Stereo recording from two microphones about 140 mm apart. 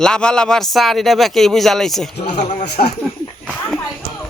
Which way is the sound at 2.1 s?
55° left (ahead or behind).